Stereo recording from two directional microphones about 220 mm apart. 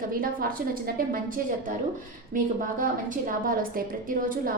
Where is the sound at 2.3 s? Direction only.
40° right (ahead or behind).